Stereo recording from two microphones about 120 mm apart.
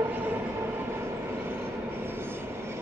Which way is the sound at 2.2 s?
20° right (ahead or behind).